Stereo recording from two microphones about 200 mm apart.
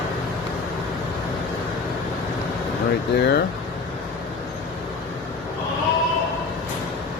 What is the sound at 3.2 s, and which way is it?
Speech, 55° left (ahead or behind).